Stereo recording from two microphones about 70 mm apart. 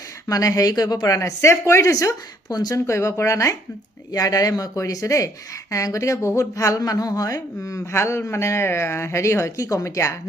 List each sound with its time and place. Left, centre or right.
0.3 s speech: left
2.8 s speech: left
4.1 s speech: left